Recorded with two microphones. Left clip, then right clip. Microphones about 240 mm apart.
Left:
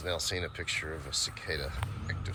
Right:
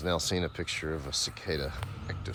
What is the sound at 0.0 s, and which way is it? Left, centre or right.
Speech, right.